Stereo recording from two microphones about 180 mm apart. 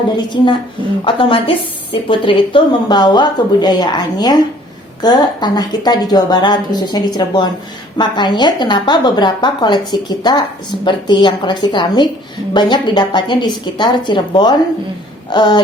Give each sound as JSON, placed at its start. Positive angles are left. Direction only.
{"t": 0.3, "sound": "a woman's voice", "side_deg": 25}